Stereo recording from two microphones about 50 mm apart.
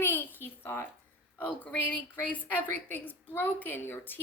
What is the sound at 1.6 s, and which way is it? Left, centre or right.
A woman's voice, left.